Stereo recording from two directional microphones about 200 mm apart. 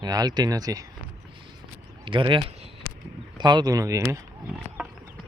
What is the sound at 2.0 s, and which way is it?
Speech, 25° right (ahead or behind).